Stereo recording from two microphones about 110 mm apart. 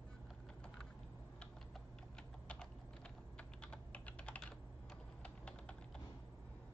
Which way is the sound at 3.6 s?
10° left (ahead or behind).